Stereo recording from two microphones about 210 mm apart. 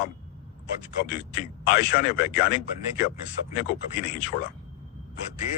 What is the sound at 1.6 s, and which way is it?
Speech, 50° left (ahead or behind).